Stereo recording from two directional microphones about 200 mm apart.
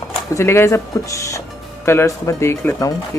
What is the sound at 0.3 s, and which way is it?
Speech, 15° left (ahead or behind).